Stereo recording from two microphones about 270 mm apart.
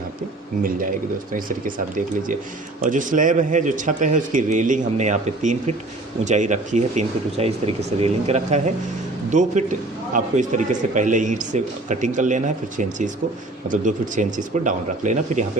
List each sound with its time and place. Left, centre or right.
0.6 s speech: right
2.8 s a man's voice: right